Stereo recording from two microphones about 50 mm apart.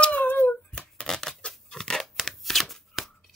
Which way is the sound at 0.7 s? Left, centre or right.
Centre.